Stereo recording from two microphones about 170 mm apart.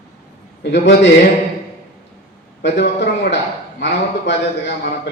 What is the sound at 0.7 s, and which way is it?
Speech, 90° left.